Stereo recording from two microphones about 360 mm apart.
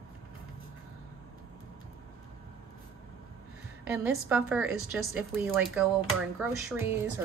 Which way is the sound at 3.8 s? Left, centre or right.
Centre.